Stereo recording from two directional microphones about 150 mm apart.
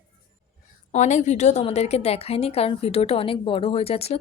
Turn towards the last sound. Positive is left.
turn(degrees=40)  # may be behind; listen again after turning